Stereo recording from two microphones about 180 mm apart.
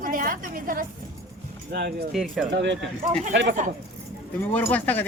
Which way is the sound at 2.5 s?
80° right.